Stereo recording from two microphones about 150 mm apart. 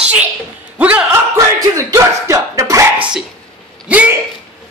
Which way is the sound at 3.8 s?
10° right (ahead or behind).